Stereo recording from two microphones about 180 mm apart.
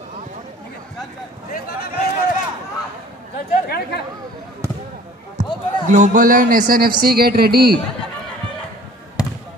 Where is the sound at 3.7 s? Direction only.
60° left (ahead or behind).